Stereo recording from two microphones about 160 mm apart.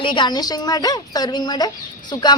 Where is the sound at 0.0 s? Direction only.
30° left (ahead or behind).